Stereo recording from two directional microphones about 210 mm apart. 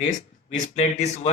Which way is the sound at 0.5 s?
35° left (ahead or behind).